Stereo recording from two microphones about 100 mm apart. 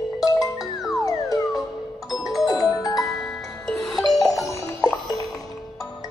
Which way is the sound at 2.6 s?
40° left (ahead or behind).